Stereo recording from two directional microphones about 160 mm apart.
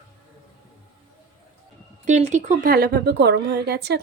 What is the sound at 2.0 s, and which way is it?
Speech, 50° right (ahead or behind).